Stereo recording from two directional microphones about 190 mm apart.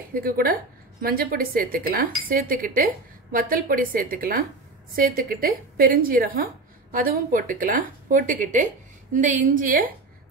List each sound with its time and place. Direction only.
0.1 s a woman's voice: 50° right (ahead or behind)